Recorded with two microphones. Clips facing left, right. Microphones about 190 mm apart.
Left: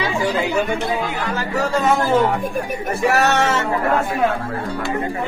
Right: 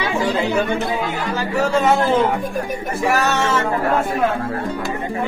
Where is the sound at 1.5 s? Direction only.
25° right (ahead or behind).